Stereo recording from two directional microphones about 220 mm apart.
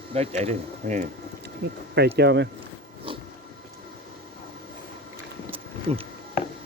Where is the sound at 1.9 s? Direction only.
50° right (ahead or behind).